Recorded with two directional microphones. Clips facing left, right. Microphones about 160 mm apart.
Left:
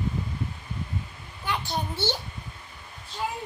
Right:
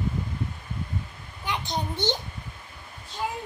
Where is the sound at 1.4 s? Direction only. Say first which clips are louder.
Even; 15° right (ahead or behind).